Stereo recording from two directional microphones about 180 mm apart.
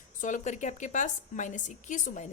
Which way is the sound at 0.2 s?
45° left (ahead or behind).